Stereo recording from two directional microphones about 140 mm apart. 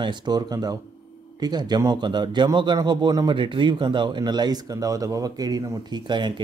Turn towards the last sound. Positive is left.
turn(degrees=-35)  # may be behind; listen again after turning